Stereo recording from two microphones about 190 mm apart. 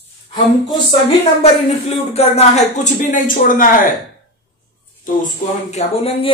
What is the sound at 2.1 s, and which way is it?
Speech, 35° left (ahead or behind).